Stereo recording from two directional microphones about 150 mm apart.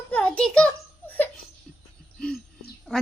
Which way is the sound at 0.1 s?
5° left (ahead or behind).